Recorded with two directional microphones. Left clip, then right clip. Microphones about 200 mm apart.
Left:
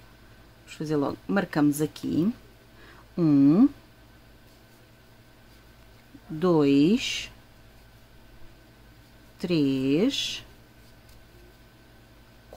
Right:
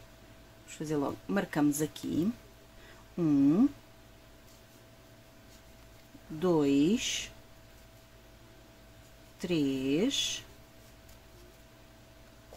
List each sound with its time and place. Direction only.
0.7 s speech: 15° left (ahead or behind)
3.2 s speech: 20° left (ahead or behind)
6.4 s speech: 20° left (ahead or behind)
9.4 s speech: 20° left (ahead or behind)